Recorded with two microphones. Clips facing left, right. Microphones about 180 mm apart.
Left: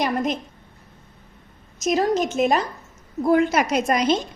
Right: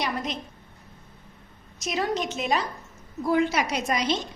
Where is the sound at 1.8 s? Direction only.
45° left (ahead or behind).